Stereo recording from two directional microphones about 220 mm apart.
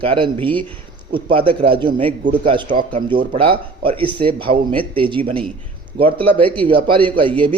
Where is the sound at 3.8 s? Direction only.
25° right (ahead or behind).